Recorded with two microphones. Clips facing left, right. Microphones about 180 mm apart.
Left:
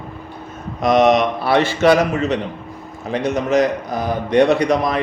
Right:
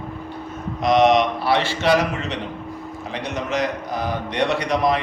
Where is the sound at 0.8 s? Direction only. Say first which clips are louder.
Left 2 dB; 50° left (ahead or behind).